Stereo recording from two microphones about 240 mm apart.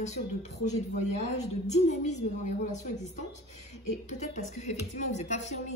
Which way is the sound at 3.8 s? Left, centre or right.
Left.